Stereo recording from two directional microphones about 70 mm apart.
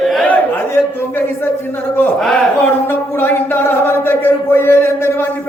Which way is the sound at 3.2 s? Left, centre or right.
Left.